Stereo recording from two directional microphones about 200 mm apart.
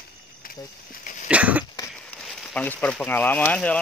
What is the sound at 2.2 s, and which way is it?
Speech, centre (ahead or behind).